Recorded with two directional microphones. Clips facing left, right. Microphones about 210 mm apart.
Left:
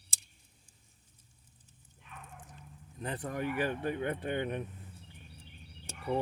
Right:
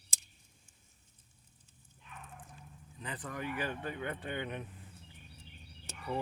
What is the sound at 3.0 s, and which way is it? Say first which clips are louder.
Speech: left 5 dB; 45° left (ahead or behind).